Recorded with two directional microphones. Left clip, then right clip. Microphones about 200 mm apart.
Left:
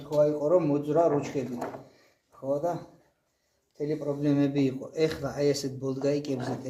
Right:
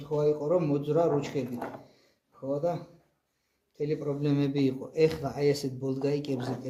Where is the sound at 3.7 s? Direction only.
35° right (ahead or behind).